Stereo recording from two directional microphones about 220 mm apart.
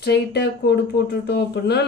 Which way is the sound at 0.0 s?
50° left (ahead or behind).